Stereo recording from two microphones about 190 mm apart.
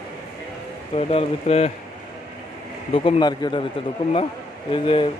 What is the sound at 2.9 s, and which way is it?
Speech, 25° left (ahead or behind).